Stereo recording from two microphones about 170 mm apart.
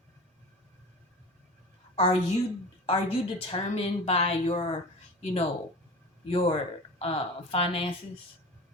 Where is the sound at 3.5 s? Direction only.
35° left (ahead or behind).